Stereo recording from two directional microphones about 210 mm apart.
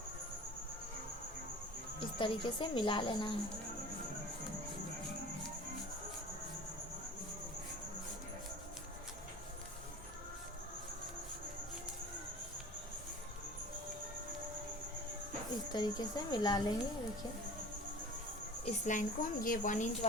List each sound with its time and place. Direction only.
2.1 s speech: 20° left (ahead or behind)
15.7 s speech: 20° left (ahead or behind)
18.6 s a woman's voice: 35° left (ahead or behind)